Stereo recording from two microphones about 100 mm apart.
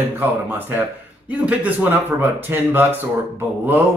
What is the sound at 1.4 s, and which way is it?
Speech, 15° right (ahead or behind).